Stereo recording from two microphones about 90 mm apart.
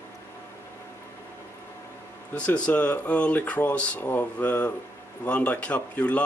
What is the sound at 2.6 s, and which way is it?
Speech, 15° left (ahead or behind).